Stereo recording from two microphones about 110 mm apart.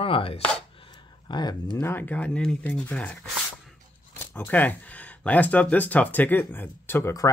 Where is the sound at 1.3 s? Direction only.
40° left (ahead or behind).